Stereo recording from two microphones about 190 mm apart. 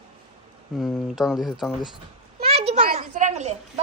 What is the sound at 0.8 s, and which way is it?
Speech, centre (ahead or behind).